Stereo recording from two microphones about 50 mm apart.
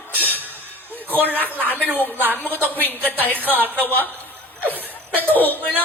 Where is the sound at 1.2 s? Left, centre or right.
Left.